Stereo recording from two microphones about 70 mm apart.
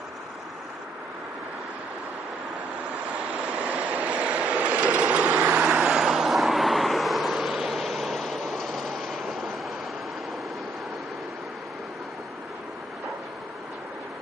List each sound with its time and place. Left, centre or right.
3.4 s vehicle: centre